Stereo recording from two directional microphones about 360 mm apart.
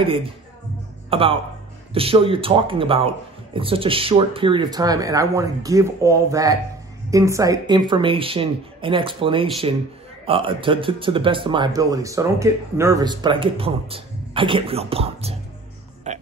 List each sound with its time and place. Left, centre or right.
0.0 s speech: centre
16.1 s music: centre